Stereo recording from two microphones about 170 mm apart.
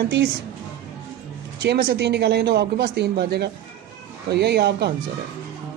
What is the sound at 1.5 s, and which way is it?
Speech, 75° right (ahead or behind).